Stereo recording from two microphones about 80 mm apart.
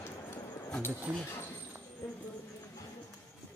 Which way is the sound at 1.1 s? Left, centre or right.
Right.